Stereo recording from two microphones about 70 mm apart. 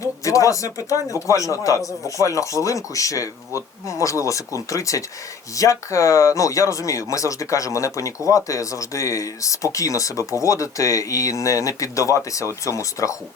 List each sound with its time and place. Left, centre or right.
0.0 s speech: left